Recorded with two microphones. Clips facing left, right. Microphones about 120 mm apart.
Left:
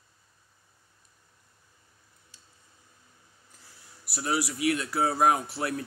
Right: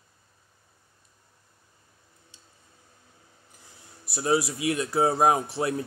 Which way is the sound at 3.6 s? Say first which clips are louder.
Right 3 dB; 25° right (ahead or behind).